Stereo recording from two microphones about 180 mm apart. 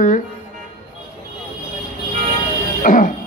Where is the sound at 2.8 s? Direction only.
45° left (ahead or behind).